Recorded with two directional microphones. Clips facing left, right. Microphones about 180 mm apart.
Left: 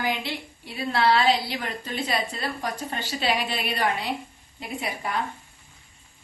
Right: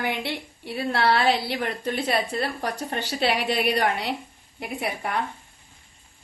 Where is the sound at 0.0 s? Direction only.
65° right (ahead or behind).